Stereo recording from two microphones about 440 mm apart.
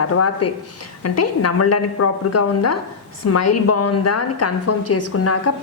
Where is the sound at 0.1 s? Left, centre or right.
Left.